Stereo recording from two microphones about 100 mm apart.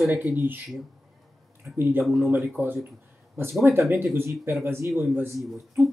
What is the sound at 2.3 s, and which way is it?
Speech, 20° right (ahead or behind).